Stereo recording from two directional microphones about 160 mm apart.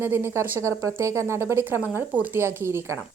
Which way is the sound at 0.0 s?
15° right (ahead or behind).